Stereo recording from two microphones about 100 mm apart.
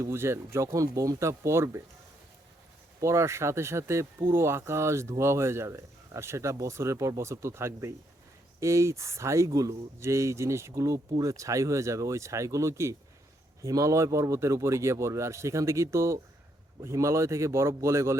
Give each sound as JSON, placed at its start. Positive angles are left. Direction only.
{"t": 0.0, "sound": "speech", "side_deg": -25}
{"t": 3.0, "sound": "speech", "side_deg": -30}